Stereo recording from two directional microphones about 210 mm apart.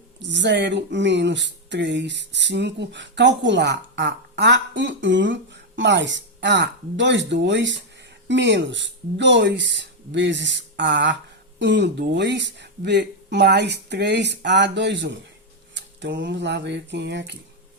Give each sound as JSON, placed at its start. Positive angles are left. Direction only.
{"t": 0.2, "sound": "speech", "side_deg": -55}